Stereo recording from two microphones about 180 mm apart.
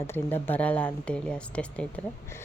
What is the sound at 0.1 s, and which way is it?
Speech, 10° left (ahead or behind).